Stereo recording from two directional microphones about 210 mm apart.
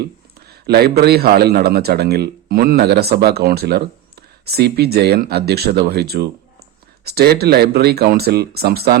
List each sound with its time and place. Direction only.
0.0 s a man's voice: 50° right (ahead or behind)